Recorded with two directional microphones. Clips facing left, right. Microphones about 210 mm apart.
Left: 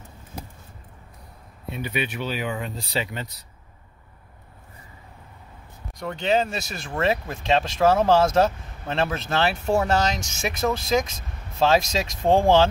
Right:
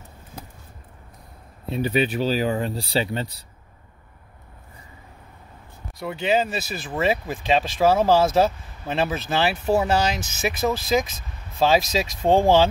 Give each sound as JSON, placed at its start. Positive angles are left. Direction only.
{"t": 1.7, "sound": "speech", "side_deg": -35}
{"t": 5.9, "sound": "speech", "side_deg": -5}